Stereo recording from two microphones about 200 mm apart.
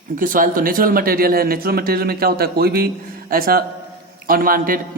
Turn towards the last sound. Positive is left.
turn(degrees=-45)  # may be behind; listen again after turning